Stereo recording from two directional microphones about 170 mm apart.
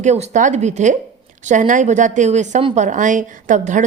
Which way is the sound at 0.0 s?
45° right (ahead or behind).